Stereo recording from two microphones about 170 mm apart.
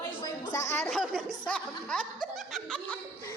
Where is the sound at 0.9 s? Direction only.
Centre (ahead or behind).